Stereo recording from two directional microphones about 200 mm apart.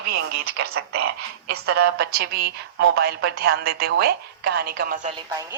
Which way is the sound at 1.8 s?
55° right (ahead or behind).